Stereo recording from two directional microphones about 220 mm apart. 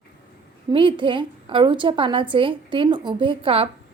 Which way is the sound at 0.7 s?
20° right (ahead or behind).